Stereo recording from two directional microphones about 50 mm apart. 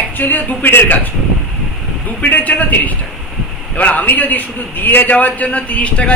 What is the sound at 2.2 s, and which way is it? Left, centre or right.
A man's voice, left.